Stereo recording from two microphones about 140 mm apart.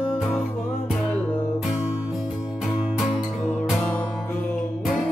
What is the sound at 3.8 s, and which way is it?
Music, 10° left (ahead or behind).